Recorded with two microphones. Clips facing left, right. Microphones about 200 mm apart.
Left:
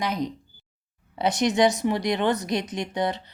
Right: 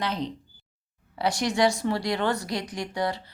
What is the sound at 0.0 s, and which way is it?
A woman's voice, 10° left (ahead or behind).